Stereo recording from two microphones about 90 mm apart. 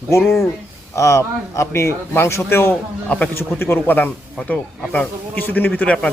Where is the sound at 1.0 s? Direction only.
35° left (ahead or behind); by 6.1 s 15° left (ahead or behind).